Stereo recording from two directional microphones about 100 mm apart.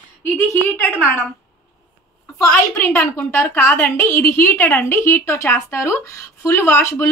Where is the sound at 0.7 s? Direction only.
15° left (ahead or behind).